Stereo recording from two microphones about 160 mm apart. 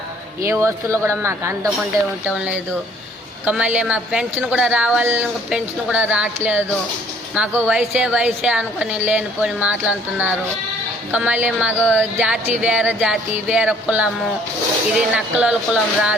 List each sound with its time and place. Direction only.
0.4 s a woman's voice: 15° right (ahead or behind)